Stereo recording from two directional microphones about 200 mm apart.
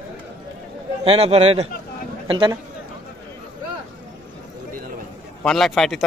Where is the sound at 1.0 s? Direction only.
30° right (ahead or behind).